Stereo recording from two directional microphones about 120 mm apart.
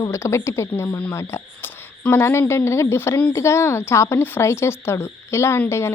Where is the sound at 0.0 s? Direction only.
25° left (ahead or behind).